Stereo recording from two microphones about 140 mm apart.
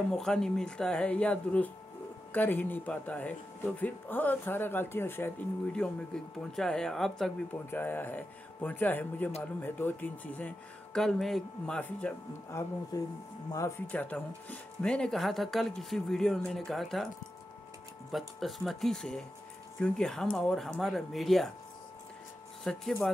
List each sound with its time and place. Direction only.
0.1 s speech: 5° left (ahead or behind)
5.7 s speech: 5° left (ahead or behind)
7.7 s speech: 15° left (ahead or behind)
12.5 s speech: 20° left (ahead or behind); by 17.1 s centre (ahead or behind)
18.1 s speech: centre (ahead or behind)
22.6 s speech: 5° left (ahead or behind)